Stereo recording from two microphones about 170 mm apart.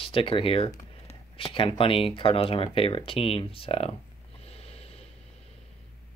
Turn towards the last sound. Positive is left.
turn(degrees=35)  # may be behind; listen again after turning